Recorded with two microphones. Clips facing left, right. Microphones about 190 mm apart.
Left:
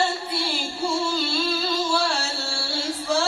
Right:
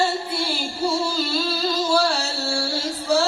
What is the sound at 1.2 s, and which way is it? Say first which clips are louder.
Humming: right 1 dB; 40° right (ahead or behind).